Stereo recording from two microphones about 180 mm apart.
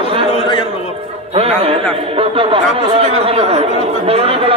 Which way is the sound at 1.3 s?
30° right (ahead or behind).